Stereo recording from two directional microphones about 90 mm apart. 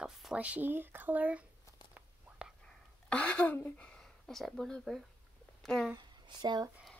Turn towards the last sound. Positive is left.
turn(degrees=-50)  # may be behind; listen again after turning